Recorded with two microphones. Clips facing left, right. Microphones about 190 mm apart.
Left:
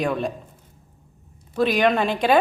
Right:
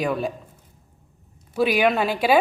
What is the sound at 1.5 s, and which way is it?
Speech, 10° right (ahead or behind).